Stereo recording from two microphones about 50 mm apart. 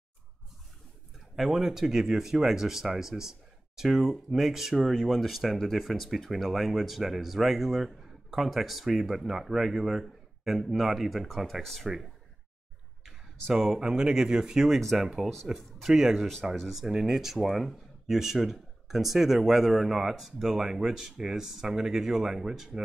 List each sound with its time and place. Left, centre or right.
1.3 s speech: centre
13.0 s a sound: centre
13.7 s speech: centre
14.7 s speech: centre